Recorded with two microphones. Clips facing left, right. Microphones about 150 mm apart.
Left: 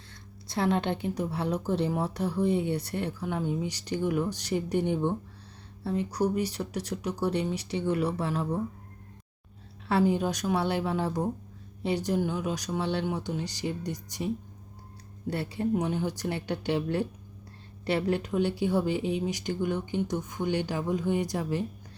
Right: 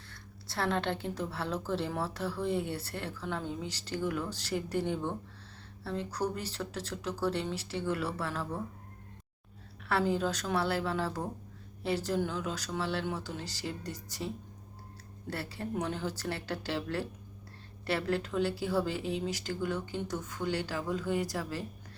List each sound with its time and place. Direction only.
0.1 s a woman's voice: 20° left (ahead or behind)
9.9 s a woman's voice: 15° left (ahead or behind)
15.3 s a woman's voice: 20° left (ahead or behind)